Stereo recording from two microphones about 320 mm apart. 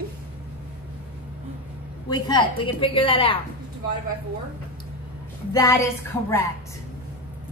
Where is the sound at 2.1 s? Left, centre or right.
Centre.